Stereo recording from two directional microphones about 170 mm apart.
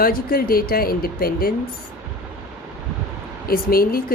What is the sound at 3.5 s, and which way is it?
Speech, 60° left (ahead or behind).